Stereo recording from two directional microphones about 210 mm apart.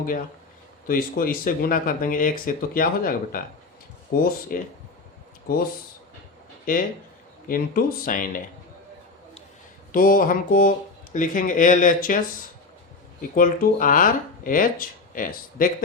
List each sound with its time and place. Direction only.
0.9 s speech: 45° left (ahead or behind)
6.7 s speech: 40° left (ahead or behind)
9.9 s speech: 40° left (ahead or behind)
13.3 s speech: 40° left (ahead or behind)